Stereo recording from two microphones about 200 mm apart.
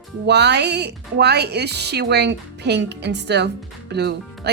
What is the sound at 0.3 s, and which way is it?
Speech, 60° right (ahead or behind).